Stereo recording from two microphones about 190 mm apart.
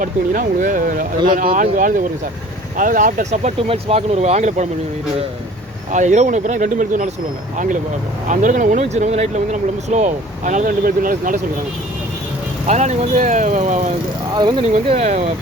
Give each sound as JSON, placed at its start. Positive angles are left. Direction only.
{"t": 0.0, "sound": "speech", "side_deg": -45}
{"t": 5.9, "sound": "speech", "side_deg": -40}
{"t": 8.3, "sound": "speech", "side_deg": -40}
{"t": 12.6, "sound": "speech", "side_deg": -40}
{"t": 14.3, "sound": "speech", "side_deg": -20}
{"t": 14.9, "sound": "speech", "side_deg": -35}